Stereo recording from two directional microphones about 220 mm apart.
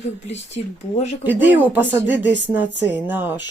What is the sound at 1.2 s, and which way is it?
Speech, 10° right (ahead or behind).